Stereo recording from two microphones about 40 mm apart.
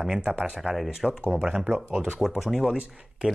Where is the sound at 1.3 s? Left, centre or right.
Centre.